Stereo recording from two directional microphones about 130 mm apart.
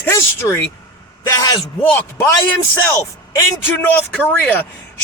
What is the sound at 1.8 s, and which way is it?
Speech, 15° left (ahead or behind).